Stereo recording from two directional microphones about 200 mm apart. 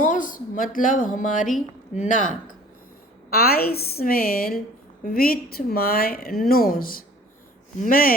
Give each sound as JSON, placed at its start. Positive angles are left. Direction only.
{"t": 0.0, "sound": "a woman's voice", "side_deg": 40}